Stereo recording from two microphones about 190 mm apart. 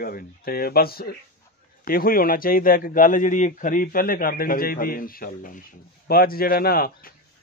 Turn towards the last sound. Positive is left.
turn(degrees=50)  # may be behind; listen again after turning